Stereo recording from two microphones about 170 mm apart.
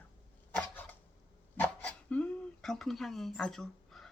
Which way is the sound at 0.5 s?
10° left (ahead or behind).